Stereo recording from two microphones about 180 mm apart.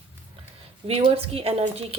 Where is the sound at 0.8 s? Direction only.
35° right (ahead or behind).